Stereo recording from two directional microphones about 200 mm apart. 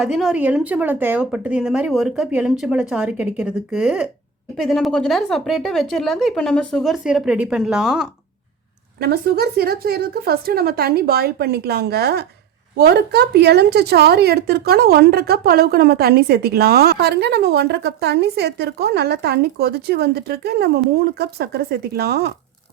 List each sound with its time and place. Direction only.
0.0 s a woman's voice: centre (ahead or behind)
9.0 s a woman's voice: 50° right (ahead or behind)